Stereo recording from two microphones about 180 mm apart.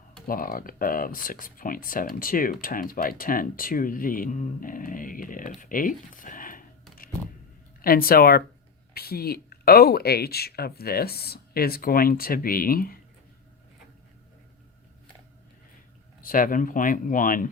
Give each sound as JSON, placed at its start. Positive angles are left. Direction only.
{"t": 0.3, "sound": "speech", "side_deg": 50}
{"t": 7.8, "sound": "speech", "side_deg": 55}
{"t": 16.2, "sound": "speech", "side_deg": 50}